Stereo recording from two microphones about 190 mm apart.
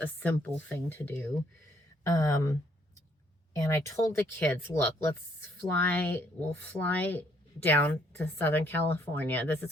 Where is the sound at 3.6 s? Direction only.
15° left (ahead or behind).